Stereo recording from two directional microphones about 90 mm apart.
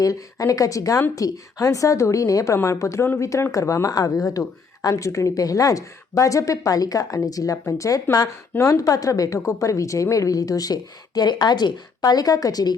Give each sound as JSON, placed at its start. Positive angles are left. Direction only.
{"t": 0.0, "sound": "a woman's voice", "side_deg": 40}